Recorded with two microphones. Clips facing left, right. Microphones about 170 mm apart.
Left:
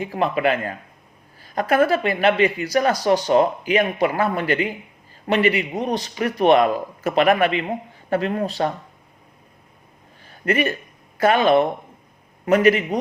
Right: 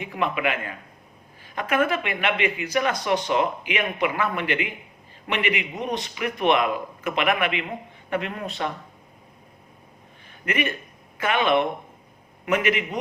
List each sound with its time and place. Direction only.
0.0 s speech: 35° left (ahead or behind)
10.2 s a sound: 35° left (ahead or behind)
11.2 s speech: 40° left (ahead or behind)